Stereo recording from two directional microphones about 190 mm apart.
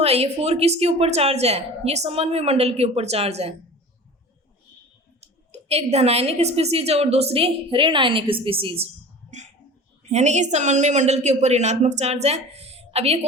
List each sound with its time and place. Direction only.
0.0 s a woman's voice: 35° right (ahead or behind)
5.2 s a woman's voice: 35° right (ahead or behind)
9.3 s a sound: 35° right (ahead or behind)
10.1 s a woman's voice: 35° right (ahead or behind)